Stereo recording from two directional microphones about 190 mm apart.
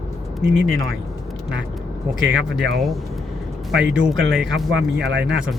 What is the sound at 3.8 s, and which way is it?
Speech, 5° right (ahead or behind).